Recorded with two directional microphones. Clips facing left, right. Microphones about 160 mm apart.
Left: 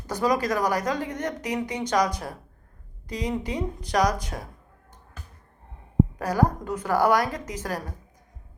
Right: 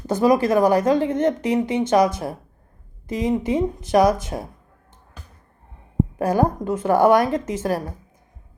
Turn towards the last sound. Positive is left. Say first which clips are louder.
# right 9 dB
turn(degrees=-25)  # may be behind; listen again after turning